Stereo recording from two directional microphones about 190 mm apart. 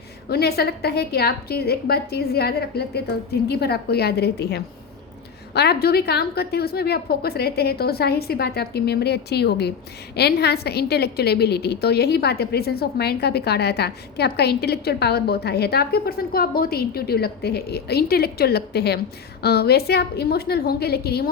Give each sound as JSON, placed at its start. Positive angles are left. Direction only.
{"t": 0.3, "sound": "a woman's voice", "side_deg": 55}